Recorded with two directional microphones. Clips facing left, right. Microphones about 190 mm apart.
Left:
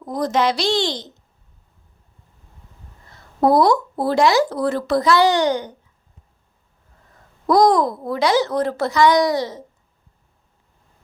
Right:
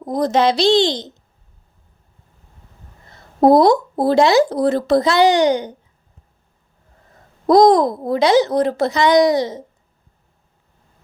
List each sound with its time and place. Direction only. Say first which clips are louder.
0.0 s speech: right 4 dB; 20° right (ahead or behind)
3.4 s speech: right 4 dB; 20° right (ahead or behind)
7.4 s speech: right 4 dB; 20° right (ahead or behind)